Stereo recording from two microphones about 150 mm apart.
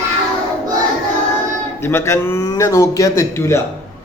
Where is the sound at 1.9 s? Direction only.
20° left (ahead or behind).